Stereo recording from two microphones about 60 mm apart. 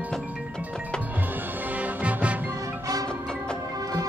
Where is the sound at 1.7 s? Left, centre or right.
Right.